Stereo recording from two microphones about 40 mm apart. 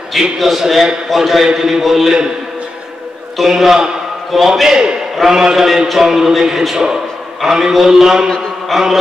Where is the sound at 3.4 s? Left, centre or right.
Centre.